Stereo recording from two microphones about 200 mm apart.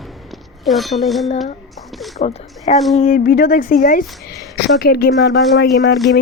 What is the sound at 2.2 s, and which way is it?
A woman's voice, 35° left (ahead or behind).